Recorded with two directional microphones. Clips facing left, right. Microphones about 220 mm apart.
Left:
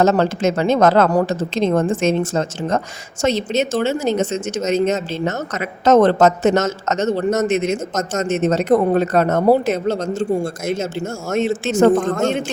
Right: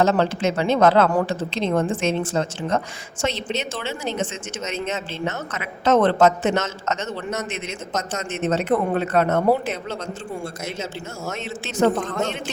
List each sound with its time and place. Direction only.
0.0 s a woman's voice: 45° left (ahead or behind)